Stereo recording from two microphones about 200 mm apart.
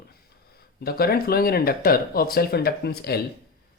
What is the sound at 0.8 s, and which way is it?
Speech, 50° left (ahead or behind).